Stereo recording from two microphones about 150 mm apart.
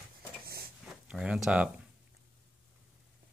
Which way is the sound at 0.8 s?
5° right (ahead or behind).